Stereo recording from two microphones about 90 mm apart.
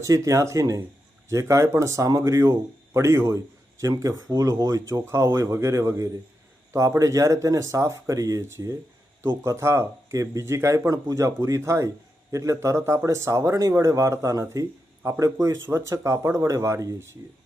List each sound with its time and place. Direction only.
0.0 s speech: 35° right (ahead or behind)